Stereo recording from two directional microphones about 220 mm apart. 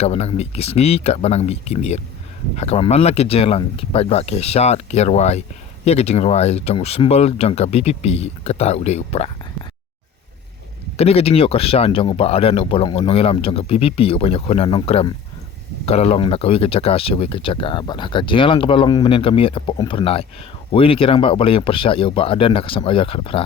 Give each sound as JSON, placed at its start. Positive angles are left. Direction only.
{"t": 0.0, "sound": "speech", "side_deg": 30}
{"t": 10.9, "sound": "speech", "side_deg": 25}